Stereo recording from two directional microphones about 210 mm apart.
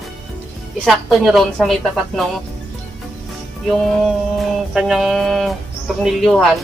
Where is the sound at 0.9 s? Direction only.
Centre (ahead or behind).